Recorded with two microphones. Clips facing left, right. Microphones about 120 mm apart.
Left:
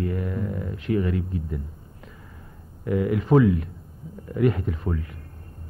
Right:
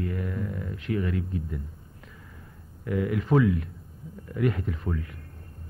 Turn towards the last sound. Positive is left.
turn(degrees=25)  # may be behind; listen again after turning